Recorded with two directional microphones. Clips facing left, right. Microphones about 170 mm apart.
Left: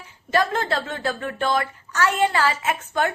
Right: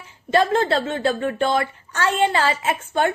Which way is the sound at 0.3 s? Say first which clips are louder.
Right 4 dB; 25° right (ahead or behind).